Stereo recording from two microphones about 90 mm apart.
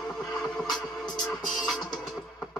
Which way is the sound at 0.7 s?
50° left (ahead or behind).